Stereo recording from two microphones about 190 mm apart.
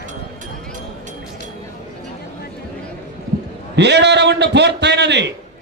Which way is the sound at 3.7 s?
65° right (ahead or behind).